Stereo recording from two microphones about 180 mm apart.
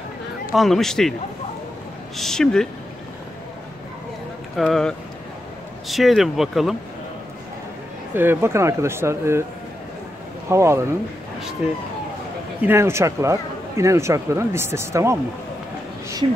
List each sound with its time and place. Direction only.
0.5 s speech: centre (ahead or behind)
2.1 s speech: 5° left (ahead or behind)
4.6 s speech: centre (ahead or behind)
8.1 s speech: 10° right (ahead or behind)
10.5 s speech: 15° right (ahead or behind)
12.6 s speech: 15° right (ahead or behind)